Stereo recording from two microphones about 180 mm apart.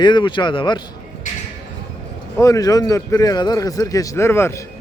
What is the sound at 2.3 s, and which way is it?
A man's voice, 20° left (ahead or behind).